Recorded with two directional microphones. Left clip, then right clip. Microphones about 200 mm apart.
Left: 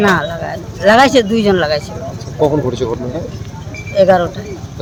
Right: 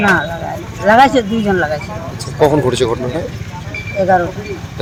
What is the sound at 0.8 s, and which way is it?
Speech, 25° left (ahead or behind).